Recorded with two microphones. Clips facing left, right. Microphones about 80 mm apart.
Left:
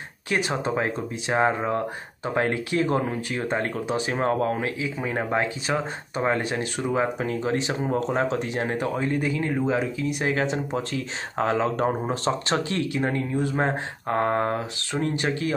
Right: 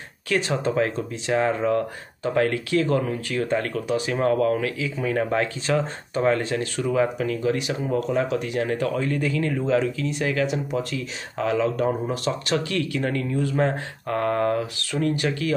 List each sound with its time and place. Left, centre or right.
0.3 s speech: left
10.3 s speech: left